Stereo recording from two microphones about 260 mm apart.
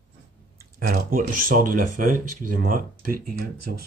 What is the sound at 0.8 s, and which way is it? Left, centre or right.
Speech, right.